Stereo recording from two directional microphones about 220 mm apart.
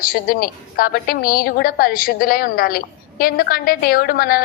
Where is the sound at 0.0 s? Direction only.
40° left (ahead or behind).